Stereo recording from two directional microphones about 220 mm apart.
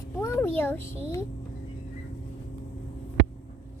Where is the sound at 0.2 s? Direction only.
10° left (ahead or behind).